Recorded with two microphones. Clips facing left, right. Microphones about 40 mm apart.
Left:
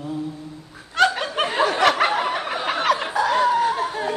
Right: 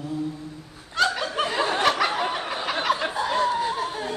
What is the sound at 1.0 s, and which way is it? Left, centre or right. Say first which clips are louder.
Snicker: left 4 dB; left.